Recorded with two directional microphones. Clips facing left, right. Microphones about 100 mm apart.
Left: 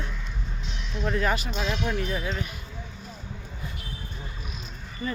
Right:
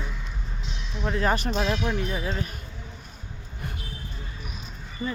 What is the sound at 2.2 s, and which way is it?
Speech, 25° right (ahead or behind).